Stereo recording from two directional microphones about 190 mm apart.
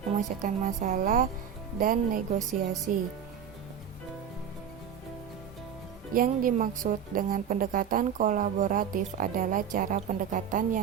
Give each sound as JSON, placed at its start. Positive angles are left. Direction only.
{"t": 0.1, "sound": "a woman's voice", "side_deg": -40}
{"t": 6.1, "sound": "a woman's voice", "side_deg": -45}